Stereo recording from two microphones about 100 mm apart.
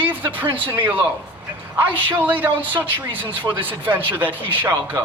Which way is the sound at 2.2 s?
20° right (ahead or behind).